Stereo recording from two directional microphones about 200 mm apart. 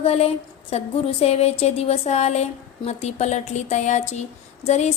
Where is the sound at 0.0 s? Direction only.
30° left (ahead or behind).